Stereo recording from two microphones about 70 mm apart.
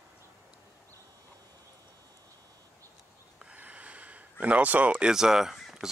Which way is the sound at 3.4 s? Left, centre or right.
Centre.